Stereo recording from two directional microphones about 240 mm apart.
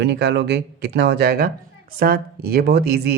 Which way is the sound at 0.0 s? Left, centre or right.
Right.